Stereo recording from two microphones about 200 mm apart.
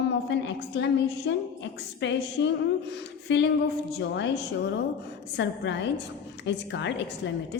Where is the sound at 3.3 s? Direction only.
60° left (ahead or behind).